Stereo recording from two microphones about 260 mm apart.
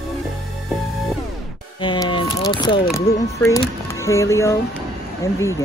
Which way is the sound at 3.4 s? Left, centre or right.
Centre.